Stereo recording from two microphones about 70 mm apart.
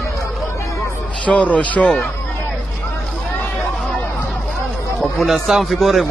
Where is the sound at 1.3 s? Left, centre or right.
Centre.